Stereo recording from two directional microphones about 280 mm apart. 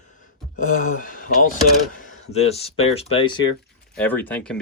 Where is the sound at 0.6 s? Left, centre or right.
Left.